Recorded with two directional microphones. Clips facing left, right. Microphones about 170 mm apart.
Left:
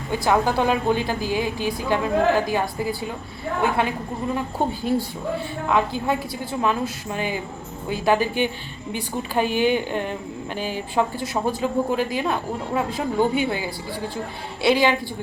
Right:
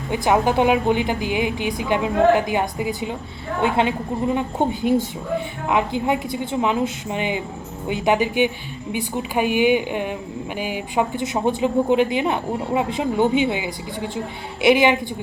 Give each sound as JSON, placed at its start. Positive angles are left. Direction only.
{"t": 0.1, "sound": "a woman's voice", "side_deg": -20}